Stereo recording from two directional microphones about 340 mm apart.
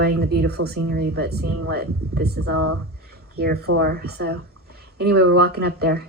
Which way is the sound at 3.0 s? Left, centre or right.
Right.